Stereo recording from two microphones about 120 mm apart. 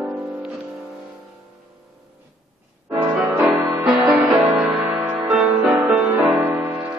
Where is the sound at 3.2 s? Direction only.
Centre (ahead or behind).